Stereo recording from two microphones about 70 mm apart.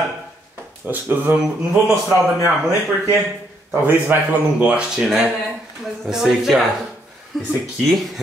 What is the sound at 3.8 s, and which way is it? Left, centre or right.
A man's voice, right.